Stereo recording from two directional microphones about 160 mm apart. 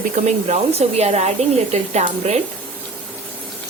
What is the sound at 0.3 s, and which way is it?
Speech, 45° right (ahead or behind).